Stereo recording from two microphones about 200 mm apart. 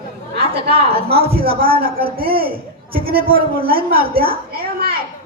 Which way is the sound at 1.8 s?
45° right (ahead or behind).